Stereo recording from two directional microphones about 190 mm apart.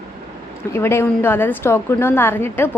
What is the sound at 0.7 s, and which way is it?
A woman's voice, 15° left (ahead or behind).